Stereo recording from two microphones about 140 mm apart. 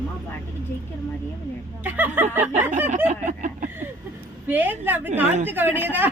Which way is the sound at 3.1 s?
60° right (ahead or behind).